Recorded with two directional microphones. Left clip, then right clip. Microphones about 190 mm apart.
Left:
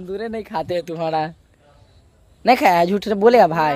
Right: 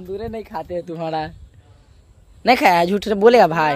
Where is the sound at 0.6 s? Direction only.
65° left (ahead or behind).